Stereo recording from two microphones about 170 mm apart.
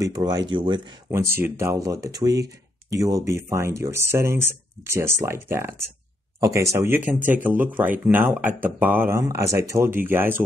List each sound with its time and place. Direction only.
0.0 s speech: 25° right (ahead or behind)
1.1 s speech: 15° right (ahead or behind)